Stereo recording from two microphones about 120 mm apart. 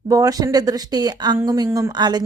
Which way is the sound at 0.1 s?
30° right (ahead or behind).